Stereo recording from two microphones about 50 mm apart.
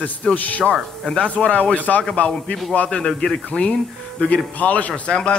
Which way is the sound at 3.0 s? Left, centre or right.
Centre.